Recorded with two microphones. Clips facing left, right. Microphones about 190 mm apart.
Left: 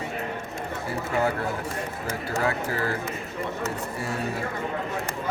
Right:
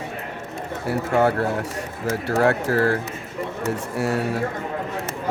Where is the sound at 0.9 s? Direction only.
75° right (ahead or behind).